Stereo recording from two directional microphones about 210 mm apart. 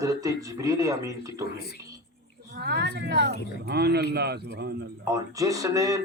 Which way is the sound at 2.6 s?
55° right (ahead or behind).